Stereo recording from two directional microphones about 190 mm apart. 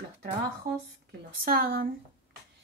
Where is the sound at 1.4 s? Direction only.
55° right (ahead or behind).